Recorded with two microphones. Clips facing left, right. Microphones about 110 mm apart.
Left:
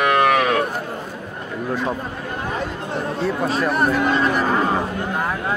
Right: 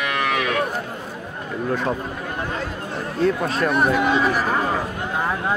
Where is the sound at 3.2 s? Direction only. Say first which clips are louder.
Right 2 dB; 5° left (ahead or behind).